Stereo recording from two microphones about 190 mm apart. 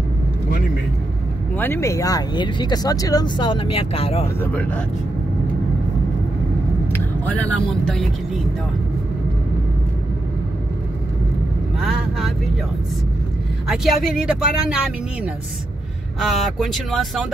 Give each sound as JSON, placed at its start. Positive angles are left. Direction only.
{"t": 1.6, "sound": "speech", "side_deg": 15}
{"t": 4.4, "sound": "speech", "side_deg": 10}
{"t": 6.9, "sound": "speech", "side_deg": 10}
{"t": 11.8, "sound": "speech", "side_deg": 0}
{"t": 13.7, "sound": "speech", "side_deg": 0}
{"t": 16.2, "sound": "speech", "side_deg": 0}